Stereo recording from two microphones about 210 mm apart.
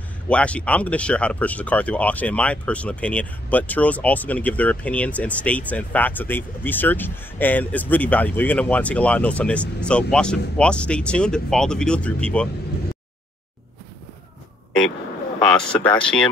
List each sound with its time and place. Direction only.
0.3 s speech: 5° left (ahead or behind)
15.4 s speech: 5° left (ahead or behind)